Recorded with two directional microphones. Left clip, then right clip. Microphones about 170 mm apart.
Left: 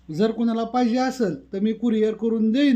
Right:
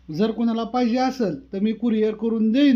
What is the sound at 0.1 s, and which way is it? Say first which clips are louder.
Speech: left 1 dB; 15° right (ahead or behind).